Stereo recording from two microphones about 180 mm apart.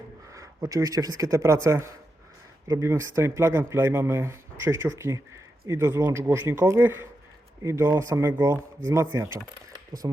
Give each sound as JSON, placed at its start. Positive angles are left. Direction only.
{"t": 0.3, "sound": "speech", "side_deg": -20}